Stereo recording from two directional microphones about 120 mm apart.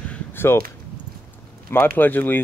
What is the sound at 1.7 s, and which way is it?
Speech, 20° left (ahead or behind).